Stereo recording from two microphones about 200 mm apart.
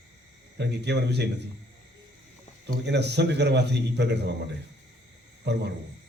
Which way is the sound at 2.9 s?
55° right (ahead or behind).